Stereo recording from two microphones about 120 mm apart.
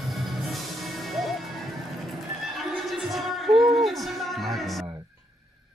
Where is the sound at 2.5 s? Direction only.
Centre (ahead or behind).